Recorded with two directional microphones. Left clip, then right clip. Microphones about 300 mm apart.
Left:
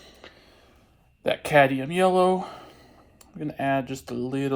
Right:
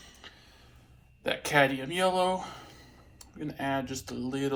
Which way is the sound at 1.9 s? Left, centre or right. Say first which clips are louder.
Left 6 dB; left.